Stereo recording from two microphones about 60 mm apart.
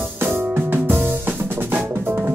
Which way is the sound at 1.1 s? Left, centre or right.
Right.